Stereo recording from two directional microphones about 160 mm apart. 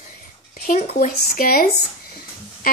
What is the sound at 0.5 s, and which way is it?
Speech, 45° left (ahead or behind).